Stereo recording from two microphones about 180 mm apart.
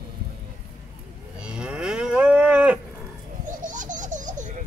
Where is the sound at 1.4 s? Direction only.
5° right (ahead or behind).